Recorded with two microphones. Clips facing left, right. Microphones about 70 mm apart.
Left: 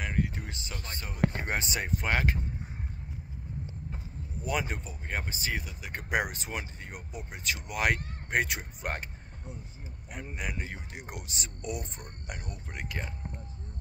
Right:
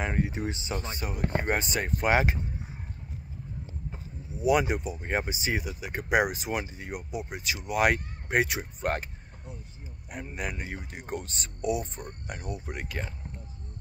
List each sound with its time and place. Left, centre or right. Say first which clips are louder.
0.0 s speech: right 4 dB; right
1.3 s speech: right 5 dB; centre
2.0 s speech: right 6 dB; centre
4.4 s speech: right 8 dB; centre
10.1 s speech: right 3 dB; centre
11.1 s speech: right 9 dB; centre
12.8 s speech: right 1 dB; centre